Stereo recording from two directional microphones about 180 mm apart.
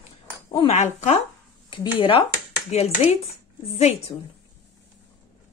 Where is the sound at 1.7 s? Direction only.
30° left (ahead or behind).